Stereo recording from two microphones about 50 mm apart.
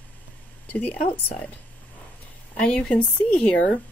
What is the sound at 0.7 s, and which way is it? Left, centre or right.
Speech, left.